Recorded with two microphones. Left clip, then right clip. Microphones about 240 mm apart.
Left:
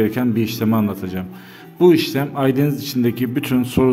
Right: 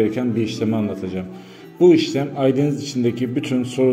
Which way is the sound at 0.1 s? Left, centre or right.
Left.